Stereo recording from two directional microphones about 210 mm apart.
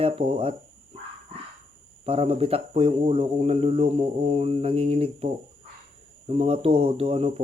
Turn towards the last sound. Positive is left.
turn(degrees=-30)  # may be behind; listen again after turning